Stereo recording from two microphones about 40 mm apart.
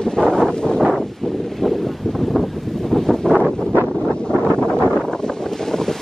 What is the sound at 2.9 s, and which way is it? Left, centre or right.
Wind noise, centre.